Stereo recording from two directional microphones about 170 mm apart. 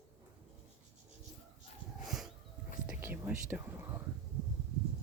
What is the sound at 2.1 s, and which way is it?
Dog, centre (ahead or behind).